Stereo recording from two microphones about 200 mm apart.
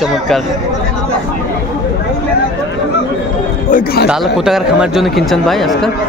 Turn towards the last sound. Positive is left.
turn(degrees=0)  # may be behind; listen again after turning